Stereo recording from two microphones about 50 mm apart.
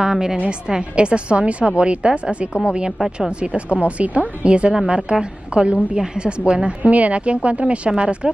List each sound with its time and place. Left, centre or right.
0.0 s a woman's voice: centre